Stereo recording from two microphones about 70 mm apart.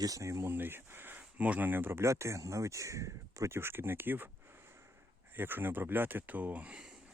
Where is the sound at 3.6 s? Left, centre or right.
Right.